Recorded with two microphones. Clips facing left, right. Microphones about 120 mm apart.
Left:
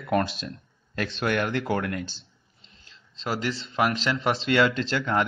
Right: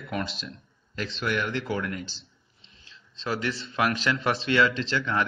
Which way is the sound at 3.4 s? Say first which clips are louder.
Left 2 dB; 30° left (ahead or behind).